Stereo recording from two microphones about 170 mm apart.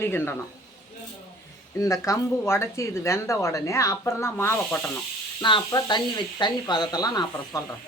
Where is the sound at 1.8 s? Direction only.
20° left (ahead or behind).